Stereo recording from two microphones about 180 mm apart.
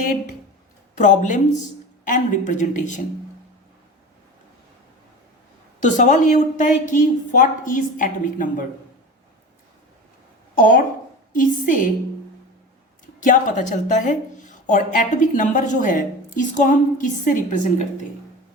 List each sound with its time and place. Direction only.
0.9 s a woman's voice: 45° left (ahead or behind)
5.8 s a woman's voice: 45° left (ahead or behind)
10.5 s a woman's voice: 50° left (ahead or behind)
13.1 s a woman's voice: 45° left (ahead or behind)